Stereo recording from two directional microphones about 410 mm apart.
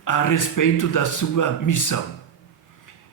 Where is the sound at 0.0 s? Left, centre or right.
Left.